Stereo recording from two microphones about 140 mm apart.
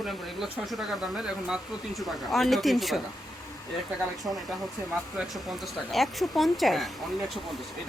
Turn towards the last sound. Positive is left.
turn(degrees=0)  # may be behind; listen again after turning